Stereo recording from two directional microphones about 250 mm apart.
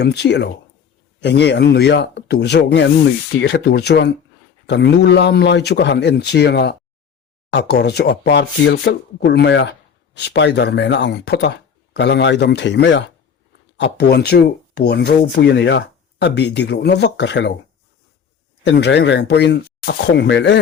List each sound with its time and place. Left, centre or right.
0.0 s speech: left
18.6 s speech: left